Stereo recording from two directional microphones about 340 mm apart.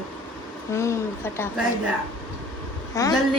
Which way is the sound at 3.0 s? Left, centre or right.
Centre.